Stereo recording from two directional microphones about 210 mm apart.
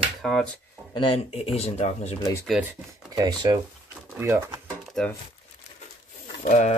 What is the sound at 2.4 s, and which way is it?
Speech, 5° right (ahead or behind).